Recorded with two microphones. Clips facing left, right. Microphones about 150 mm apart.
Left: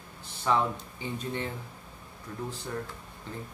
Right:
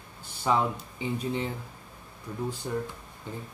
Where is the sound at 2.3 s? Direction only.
15° right (ahead or behind).